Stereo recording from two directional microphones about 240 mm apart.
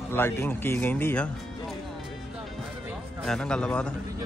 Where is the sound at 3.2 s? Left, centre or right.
Centre.